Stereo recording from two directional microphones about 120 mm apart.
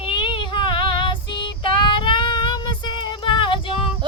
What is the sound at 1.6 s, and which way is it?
Child singing, 45° left (ahead or behind).